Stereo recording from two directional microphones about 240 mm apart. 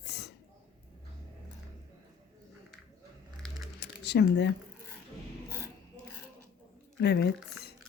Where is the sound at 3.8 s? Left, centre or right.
Left.